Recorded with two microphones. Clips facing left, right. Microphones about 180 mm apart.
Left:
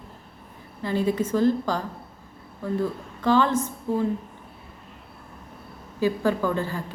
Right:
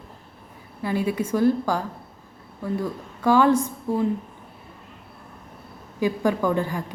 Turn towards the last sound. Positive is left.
turn(degrees=-15)  # may be behind; listen again after turning